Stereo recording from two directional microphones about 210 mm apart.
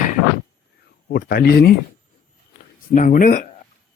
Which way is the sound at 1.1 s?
45° left (ahead or behind).